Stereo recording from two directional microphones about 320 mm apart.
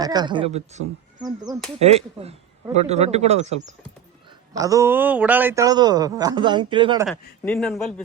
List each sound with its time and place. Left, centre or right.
0.0 s speech: centre
4.5 s speech: centre
7.1 s a man's voice: centre